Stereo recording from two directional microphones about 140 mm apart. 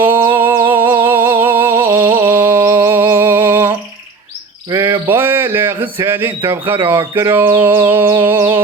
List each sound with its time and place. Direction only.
0.0 s music: 15° right (ahead or behind)
4.7 s a sound: 20° right (ahead or behind)
6.0 s speech: 15° right (ahead or behind)